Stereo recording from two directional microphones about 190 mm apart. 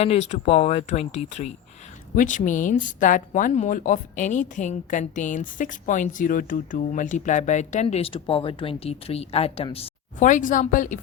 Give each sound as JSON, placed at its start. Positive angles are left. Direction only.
{"t": 0.0, "sound": "speech", "side_deg": 35}